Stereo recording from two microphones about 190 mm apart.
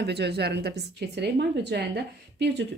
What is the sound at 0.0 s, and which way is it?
Speech, 60° right (ahead or behind).